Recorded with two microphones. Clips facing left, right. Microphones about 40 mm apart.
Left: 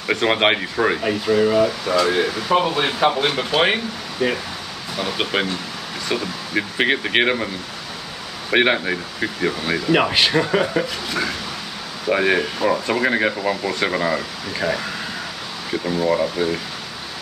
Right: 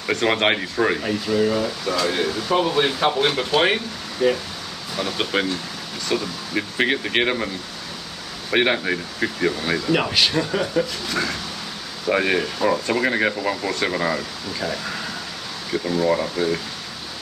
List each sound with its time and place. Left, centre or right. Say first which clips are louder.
0.1 s speech: left 2 dB; centre
1.0 s speech: left 3 dB; centre
8.5 s speech: left 2 dB; centre
8.8 s speech: even; centre; by 10.9 s left
11.1 s speech: left 1 dB; centre
15.7 s speech: even; centre